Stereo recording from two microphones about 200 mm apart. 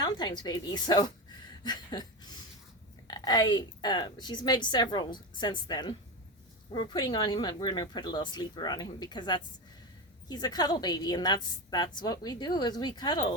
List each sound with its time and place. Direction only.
0.0 s a woman's voice: 20° left (ahead or behind)